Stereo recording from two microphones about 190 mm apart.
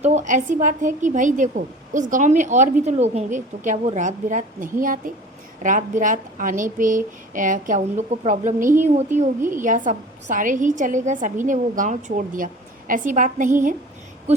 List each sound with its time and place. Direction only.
0.0 s a woman's voice: 35° right (ahead or behind)